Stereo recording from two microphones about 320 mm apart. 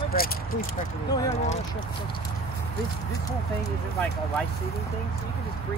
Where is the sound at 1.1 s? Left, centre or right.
Centre.